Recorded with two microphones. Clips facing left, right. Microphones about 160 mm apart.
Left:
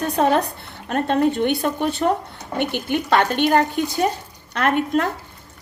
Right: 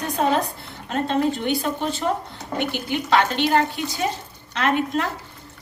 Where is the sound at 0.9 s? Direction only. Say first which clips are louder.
Left 3 dB; 55° left (ahead or behind).